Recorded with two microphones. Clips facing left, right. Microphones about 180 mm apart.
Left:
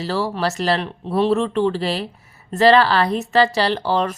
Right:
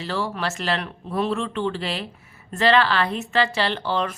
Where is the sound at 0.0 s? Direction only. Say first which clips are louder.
Left 5 dB; 40° left (ahead or behind).